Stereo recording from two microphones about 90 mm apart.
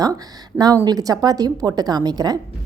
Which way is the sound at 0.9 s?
45° right (ahead or behind).